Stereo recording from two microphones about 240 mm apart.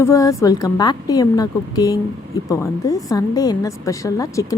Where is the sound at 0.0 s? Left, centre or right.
Centre.